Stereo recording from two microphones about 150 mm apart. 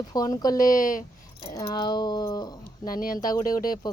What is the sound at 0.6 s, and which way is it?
Speech, 65° left (ahead or behind).